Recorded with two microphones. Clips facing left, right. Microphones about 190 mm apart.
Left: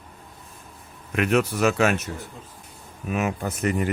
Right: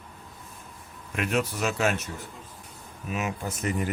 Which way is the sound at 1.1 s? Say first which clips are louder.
Left 6 dB; 65° left (ahead or behind).